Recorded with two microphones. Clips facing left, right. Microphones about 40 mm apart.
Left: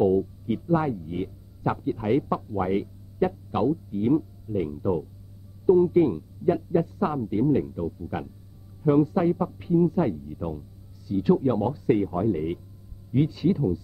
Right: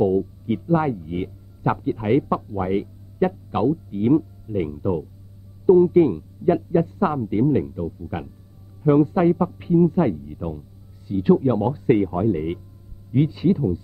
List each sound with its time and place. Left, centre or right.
0.0 s speech: centre
0.5 s a man's voice: right
2.5 s speech: centre
3.2 s a man's voice: right
7.7 s speech: centre
8.8 s a man's voice: right
11.7 s a man's voice: right; by 13.7 s centre